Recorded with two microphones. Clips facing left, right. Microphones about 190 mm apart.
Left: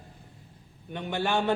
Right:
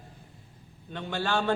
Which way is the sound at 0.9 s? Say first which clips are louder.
Left 2 dB; 15° left (ahead or behind).